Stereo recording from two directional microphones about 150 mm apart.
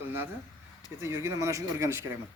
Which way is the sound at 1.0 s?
20° right (ahead or behind).